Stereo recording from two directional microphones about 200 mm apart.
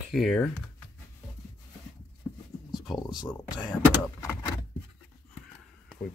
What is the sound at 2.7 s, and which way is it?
Speech, 20° left (ahead or behind).